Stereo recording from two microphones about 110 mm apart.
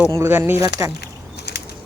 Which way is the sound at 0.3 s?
20° right (ahead or behind).